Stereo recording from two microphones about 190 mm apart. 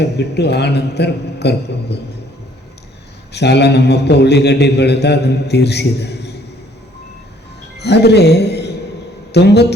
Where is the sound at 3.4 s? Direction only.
60° left (ahead or behind).